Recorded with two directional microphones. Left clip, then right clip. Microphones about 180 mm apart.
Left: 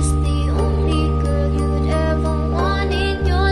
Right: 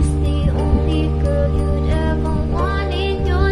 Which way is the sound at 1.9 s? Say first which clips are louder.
Left 2 dB; 25° left (ahead or behind).